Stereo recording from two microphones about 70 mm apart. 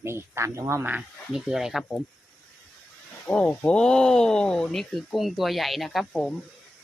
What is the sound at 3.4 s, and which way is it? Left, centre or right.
Speech, centre.